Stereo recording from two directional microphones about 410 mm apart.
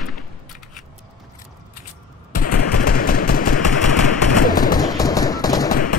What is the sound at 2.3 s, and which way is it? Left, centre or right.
Machine gun, centre.